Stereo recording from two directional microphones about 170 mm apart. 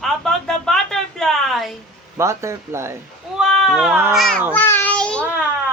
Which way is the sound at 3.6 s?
Centre (ahead or behind).